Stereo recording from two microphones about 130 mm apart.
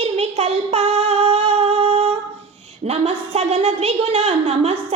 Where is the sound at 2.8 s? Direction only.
50° right (ahead or behind).